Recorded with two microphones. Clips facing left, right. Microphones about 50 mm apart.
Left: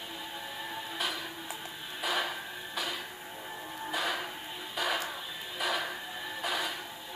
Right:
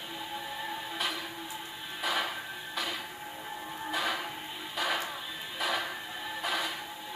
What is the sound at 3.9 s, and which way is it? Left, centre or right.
Music, centre.